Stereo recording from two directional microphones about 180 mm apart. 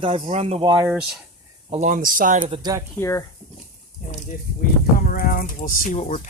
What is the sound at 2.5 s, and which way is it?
Speech, 20° right (ahead or behind).